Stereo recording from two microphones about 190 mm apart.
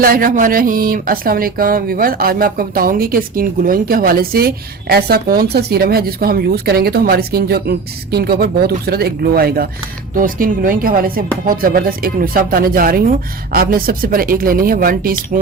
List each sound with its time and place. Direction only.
0.0 s speech: 50° right (ahead or behind)